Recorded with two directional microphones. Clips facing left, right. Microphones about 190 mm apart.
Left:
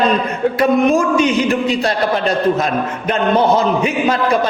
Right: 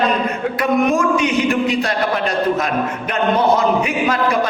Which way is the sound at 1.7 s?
30° left (ahead or behind).